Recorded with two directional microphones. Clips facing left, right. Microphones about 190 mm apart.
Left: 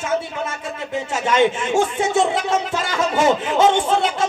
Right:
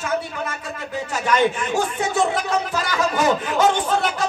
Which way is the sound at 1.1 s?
25° left (ahead or behind).